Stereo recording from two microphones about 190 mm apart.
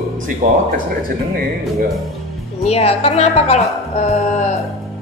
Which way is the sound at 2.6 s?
35° left (ahead or behind).